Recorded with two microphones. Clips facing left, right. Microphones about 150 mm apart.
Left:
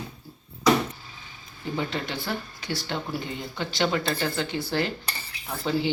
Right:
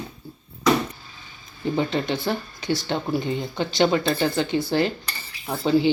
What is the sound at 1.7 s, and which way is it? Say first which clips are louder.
Speech: right 6 dB; 25° right (ahead or behind).